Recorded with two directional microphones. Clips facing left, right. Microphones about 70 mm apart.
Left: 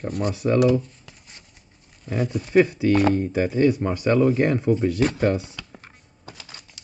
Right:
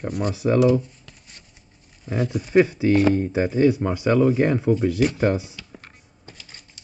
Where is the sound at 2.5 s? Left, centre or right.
Right.